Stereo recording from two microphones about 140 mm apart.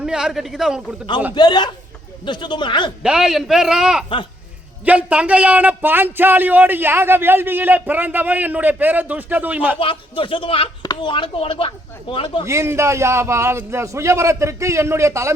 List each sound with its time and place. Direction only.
0.0 s a man's voice: 5° right (ahead or behind)
1.3 s speech: 30° left (ahead or behind)
3.0 s a man's voice: 5° right (ahead or behind)
9.8 s speech: 40° left (ahead or behind)
12.5 s a man's voice: 20° right (ahead or behind)